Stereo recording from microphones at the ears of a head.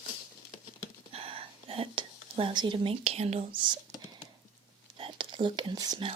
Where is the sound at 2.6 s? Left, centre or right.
Right.